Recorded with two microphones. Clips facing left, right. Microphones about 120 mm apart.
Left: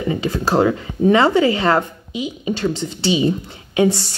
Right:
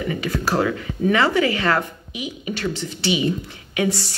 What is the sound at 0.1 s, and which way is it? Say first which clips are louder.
A woman's voice: left 6 dB; 25° left (ahead or behind).